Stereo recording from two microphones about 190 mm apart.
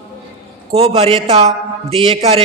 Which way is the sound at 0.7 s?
30° right (ahead or behind).